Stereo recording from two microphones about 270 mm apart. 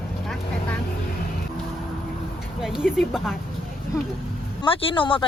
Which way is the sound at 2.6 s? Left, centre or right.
Centre.